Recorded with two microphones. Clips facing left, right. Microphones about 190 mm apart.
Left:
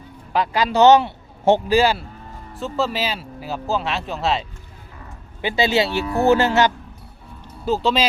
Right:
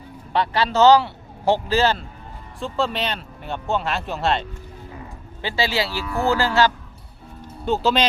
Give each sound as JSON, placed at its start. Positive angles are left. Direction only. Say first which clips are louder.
{"t": 0.3, "sound": "a man's voice", "louder": "left 1 dB", "side_deg": 10}
{"t": 5.4, "sound": "speech", "louder": "left 4 dB", "side_deg": 20}
{"t": 7.6, "sound": "speech", "louder": "even", "side_deg": 0}